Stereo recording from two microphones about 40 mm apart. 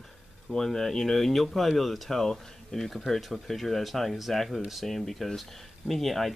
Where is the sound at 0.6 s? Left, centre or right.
Centre.